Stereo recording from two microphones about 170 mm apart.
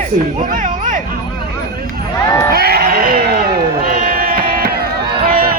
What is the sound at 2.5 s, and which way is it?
Music, 65° right (ahead or behind).